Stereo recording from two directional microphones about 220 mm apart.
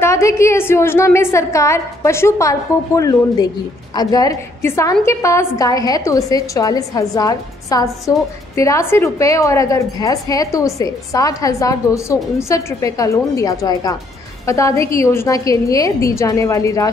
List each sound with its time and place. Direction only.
0.0 s a woman's voice: 15° left (ahead or behind)